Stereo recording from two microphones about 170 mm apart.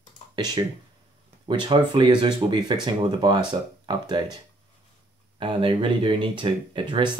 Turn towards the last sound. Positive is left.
turn(degrees=-30)  # may be behind; listen again after turning